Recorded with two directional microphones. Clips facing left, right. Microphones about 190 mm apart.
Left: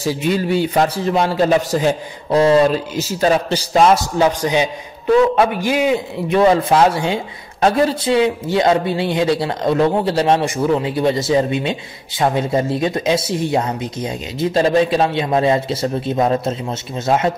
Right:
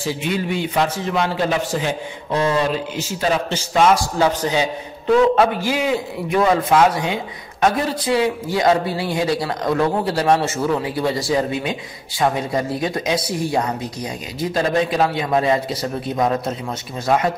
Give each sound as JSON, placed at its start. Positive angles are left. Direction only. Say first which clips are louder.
{"t": 0.0, "sound": "a man's voice", "louder": "left 4 dB", "side_deg": 40}
{"t": 4.2, "sound": "a man's voice", "louder": "left 2 dB", "side_deg": 15}